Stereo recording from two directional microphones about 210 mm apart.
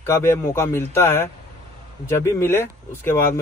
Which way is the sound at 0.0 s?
10° left (ahead or behind).